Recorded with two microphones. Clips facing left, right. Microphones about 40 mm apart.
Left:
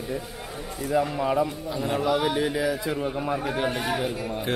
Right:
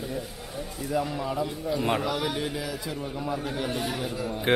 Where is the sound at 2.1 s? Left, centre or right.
Centre.